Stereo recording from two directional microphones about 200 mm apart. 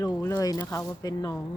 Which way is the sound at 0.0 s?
15° left (ahead or behind).